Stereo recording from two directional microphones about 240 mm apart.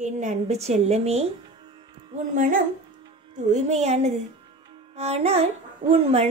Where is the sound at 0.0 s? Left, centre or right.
Right.